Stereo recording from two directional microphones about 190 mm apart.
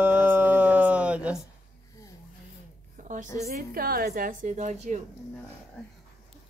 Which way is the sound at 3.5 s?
50° right (ahead or behind).